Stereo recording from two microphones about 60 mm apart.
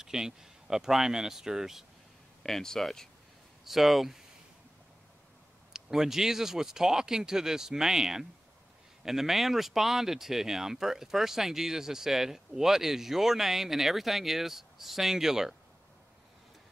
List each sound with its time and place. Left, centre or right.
0.0 s speech: centre
2.4 s speech: centre
3.6 s speech: centre
5.7 s speech: centre